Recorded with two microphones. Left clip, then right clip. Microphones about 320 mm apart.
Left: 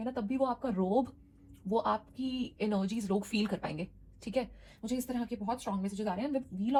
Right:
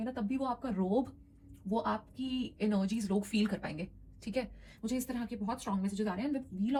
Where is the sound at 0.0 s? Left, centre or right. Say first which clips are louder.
Left 4 dB; centre.